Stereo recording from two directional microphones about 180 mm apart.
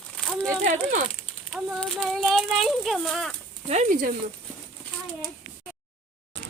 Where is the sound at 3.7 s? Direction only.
45° right (ahead or behind).